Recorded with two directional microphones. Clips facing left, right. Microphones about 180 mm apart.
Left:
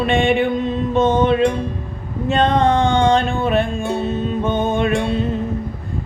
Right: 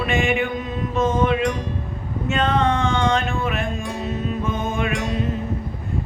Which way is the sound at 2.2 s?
35° left (ahead or behind).